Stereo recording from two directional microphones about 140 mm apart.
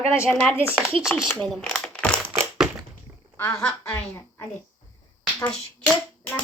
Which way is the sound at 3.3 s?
20° left (ahead or behind).